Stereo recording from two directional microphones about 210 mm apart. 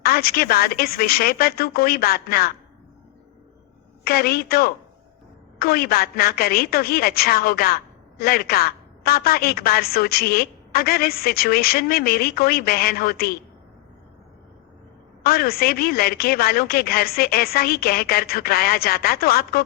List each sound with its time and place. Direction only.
0.0 s a woman's voice: 45° left (ahead or behind)
4.0 s a woman's voice: 45° left (ahead or behind)
15.2 s a woman's voice: 45° left (ahead or behind)